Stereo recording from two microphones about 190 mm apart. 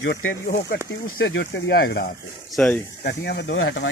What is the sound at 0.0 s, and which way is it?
Speech, 90° left.